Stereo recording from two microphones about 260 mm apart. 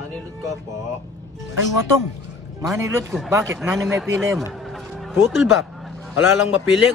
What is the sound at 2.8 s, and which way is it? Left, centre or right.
Speech, centre.